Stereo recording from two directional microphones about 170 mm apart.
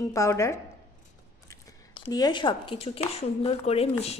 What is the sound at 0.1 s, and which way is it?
Speech, 15° left (ahead or behind).